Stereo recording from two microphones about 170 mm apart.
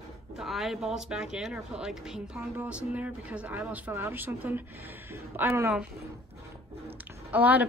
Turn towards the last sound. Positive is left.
turn(degrees=-10)  # may be behind; listen again after turning